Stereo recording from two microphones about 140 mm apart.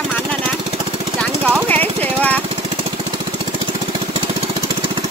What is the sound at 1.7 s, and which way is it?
Jackhammer, 10° left (ahead or behind).